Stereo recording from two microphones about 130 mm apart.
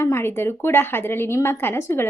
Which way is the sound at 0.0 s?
20° left (ahead or behind).